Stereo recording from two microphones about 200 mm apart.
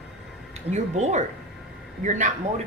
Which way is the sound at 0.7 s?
35° right (ahead or behind).